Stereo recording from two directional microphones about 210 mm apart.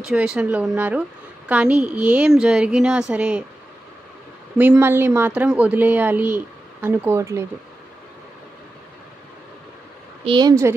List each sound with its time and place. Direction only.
0.1 s a woman's voice: 5° right (ahead or behind)
4.6 s speech: 10° right (ahead or behind)
10.2 s speech: 20° right (ahead or behind)